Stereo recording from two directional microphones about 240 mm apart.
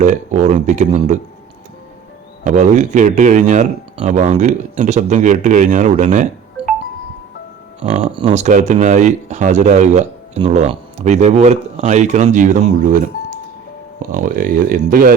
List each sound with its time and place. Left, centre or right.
0.0 s speech: right
2.4 s speech: right
7.8 s speech: right
14.0 s speech: right